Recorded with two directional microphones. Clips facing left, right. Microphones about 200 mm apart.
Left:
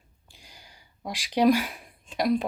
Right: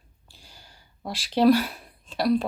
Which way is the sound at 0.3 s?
15° left (ahead or behind).